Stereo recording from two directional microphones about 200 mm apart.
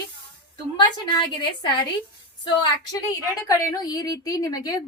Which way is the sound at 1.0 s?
20° left (ahead or behind).